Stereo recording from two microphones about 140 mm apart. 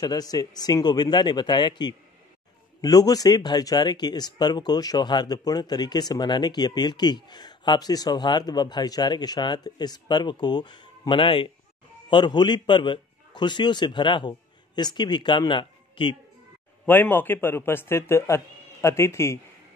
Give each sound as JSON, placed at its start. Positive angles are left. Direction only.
{"t": 0.0, "sound": "a man's voice", "side_deg": 30}
{"t": 16.8, "sound": "speech", "side_deg": 15}